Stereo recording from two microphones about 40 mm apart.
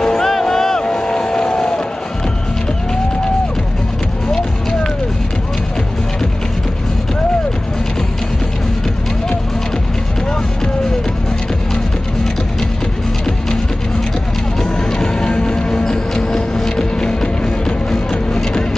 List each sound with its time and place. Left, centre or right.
0.0 s boat: centre
14.6 s music: centre